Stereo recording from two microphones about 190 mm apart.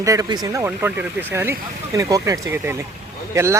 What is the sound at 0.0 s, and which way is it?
Speech, 20° right (ahead or behind).